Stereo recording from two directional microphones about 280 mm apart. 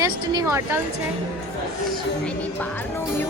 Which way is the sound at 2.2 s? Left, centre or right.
Centre.